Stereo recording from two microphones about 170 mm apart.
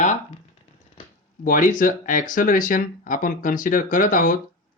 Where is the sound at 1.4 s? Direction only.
50° left (ahead or behind).